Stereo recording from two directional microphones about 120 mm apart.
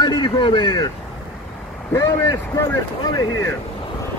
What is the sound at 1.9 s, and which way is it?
Speech, 20° left (ahead or behind).